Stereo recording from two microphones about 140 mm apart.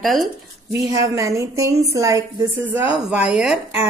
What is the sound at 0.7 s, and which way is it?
Speech, 25° right (ahead or behind).